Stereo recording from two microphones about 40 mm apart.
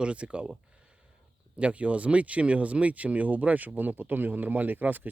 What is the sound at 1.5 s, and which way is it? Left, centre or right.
Speech, right.